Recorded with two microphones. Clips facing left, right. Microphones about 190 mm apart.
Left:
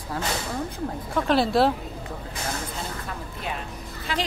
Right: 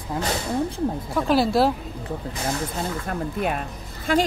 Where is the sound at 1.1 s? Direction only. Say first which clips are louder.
Right 1 dB; 5° right (ahead or behind).